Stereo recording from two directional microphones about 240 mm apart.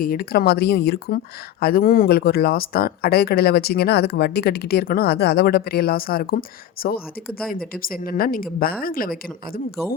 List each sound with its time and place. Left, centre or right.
0.0 s speech: left